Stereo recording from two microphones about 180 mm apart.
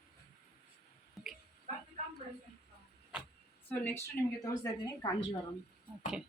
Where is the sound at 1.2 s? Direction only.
Centre (ahead or behind).